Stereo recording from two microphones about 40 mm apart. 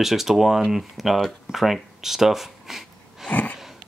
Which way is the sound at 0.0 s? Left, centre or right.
Centre.